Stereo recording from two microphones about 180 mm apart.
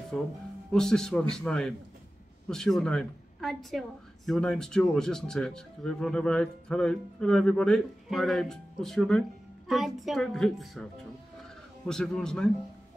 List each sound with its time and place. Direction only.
0.1 s speech: 5° left (ahead or behind)